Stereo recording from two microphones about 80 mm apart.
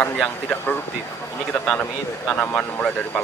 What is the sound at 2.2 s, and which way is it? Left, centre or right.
Speech, left.